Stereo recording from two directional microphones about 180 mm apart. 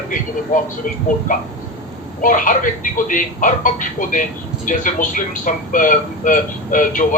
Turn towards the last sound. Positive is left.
turn(degrees=45)  # may be behind; listen again after turning